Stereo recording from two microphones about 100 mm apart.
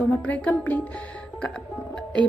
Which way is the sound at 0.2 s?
15° left (ahead or behind).